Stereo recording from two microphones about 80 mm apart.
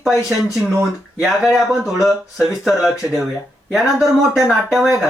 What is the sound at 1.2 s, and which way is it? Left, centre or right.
Speech, centre.